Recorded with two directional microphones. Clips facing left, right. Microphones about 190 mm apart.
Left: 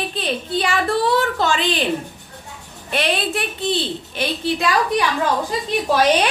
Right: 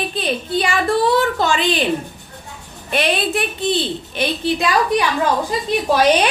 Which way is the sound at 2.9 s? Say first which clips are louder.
Right 2 dB; 15° right (ahead or behind).